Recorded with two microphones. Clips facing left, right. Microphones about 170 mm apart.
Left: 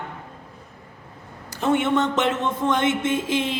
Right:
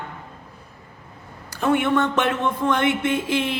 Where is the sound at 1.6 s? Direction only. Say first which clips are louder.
Right 1 dB; 20° left (ahead or behind).